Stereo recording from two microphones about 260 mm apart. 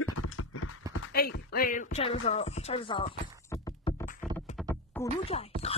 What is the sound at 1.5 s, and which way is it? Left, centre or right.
Speech, left.